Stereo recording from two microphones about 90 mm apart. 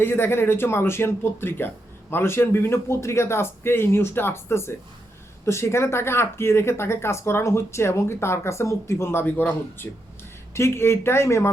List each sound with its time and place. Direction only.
0.0 s speech: 25° left (ahead or behind)